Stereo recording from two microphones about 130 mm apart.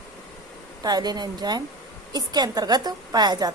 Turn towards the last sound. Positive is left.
turn(degrees=-30)  # may be behind; listen again after turning